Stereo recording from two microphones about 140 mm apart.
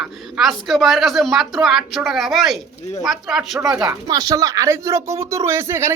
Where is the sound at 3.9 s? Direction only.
30° right (ahead or behind).